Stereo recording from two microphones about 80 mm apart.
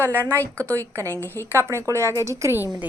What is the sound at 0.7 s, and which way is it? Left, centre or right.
Speech, right.